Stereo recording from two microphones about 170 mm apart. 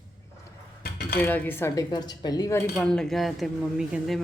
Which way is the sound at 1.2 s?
10° left (ahead or behind).